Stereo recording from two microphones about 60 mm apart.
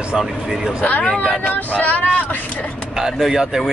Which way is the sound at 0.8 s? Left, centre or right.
Left.